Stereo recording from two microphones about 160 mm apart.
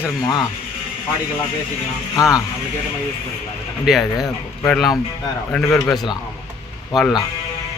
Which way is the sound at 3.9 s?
5° right (ahead or behind).